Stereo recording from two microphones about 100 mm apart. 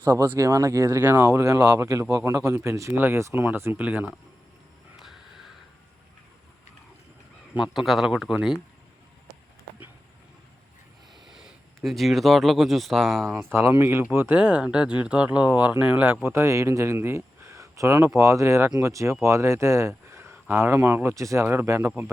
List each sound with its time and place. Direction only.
0.0 s speech: 30° right (ahead or behind); by 4.1 s 15° right (ahead or behind)
4.9 s a sound: 5° right (ahead or behind)
7.5 s a man's voice: 5° right (ahead or behind)
11.1 s speech: 5° right (ahead or behind)
13.5 s speech: 25° right (ahead or behind)
16.2 s speech: 25° right (ahead or behind)